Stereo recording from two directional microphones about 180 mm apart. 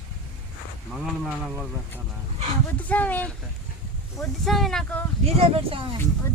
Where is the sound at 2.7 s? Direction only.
10° left (ahead or behind).